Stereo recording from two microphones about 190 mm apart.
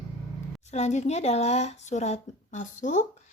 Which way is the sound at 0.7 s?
35° left (ahead or behind).